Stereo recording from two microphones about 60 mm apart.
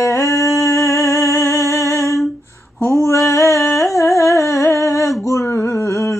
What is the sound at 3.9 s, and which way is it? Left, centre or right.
Humming, left.